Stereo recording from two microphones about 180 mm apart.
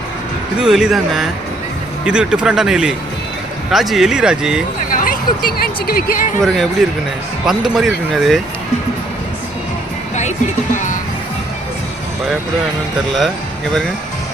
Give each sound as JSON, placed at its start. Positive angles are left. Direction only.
{"t": 0.6, "sound": "speech", "side_deg": -5}
{"t": 4.9, "sound": "speech", "side_deg": 50}
{"t": 6.4, "sound": "speech", "side_deg": 0}